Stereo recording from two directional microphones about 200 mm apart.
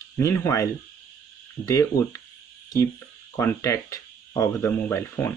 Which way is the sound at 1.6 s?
15° left (ahead or behind).